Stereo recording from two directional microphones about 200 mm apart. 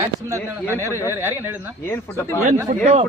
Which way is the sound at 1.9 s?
15° left (ahead or behind).